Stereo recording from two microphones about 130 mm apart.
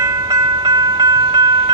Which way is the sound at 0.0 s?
30° right (ahead or behind).